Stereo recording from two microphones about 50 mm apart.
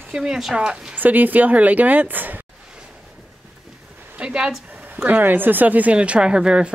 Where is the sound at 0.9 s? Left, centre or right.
Right.